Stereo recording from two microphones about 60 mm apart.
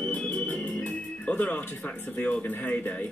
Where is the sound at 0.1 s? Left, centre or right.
Left.